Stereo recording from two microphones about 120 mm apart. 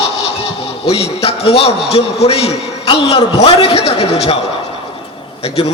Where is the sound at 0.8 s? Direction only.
55° left (ahead or behind).